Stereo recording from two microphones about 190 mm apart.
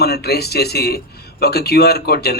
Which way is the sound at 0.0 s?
60° left (ahead or behind).